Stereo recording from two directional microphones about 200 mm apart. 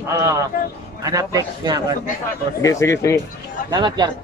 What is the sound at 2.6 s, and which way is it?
Speech, 15° left (ahead or behind).